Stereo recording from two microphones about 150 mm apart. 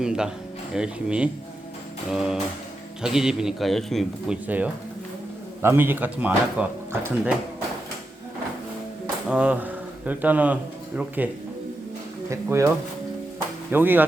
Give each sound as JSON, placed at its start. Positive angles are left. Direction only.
{"t": 0.0, "sound": "a man's voice", "side_deg": -5}
{"t": 4.4, "sound": "speech", "side_deg": -10}
{"t": 9.3, "sound": "a man's voice", "side_deg": -10}
{"t": 12.3, "sound": "speech", "side_deg": -20}